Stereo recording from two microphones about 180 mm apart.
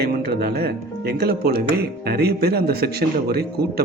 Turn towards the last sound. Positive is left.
turn(degrees=-60)  # may be behind; listen again after turning